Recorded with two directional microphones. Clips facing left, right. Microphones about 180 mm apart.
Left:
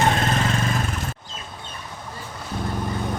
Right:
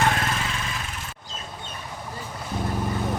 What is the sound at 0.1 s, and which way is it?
Vehicle, 35° left (ahead or behind).